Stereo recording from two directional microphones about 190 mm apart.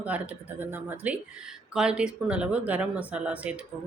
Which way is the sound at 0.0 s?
10° right (ahead or behind).